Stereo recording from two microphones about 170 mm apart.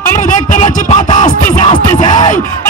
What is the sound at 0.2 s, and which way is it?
Music, 45° left (ahead or behind).